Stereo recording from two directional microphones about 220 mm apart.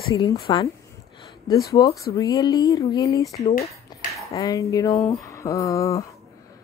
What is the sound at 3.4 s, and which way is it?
Speech, 30° left (ahead or behind).